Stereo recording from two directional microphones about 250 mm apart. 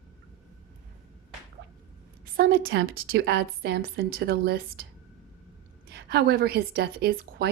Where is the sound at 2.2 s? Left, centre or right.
Right.